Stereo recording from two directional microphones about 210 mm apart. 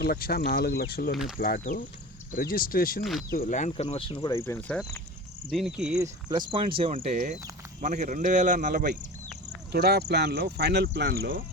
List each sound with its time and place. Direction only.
0.0 s speech: 45° left (ahead or behind)
1.1 s cricket: centre (ahead or behind)
1.4 s speech: 45° left (ahead or behind)
3.0 s cricket: centre (ahead or behind)
3.3 s speech: 40° left (ahead or behind)
4.3 s speech: 10° left (ahead or behind)
5.5 s cricket: centre (ahead or behind)
6.0 s speech: 20° right (ahead or behind)
7.8 s speech: 35° right (ahead or behind)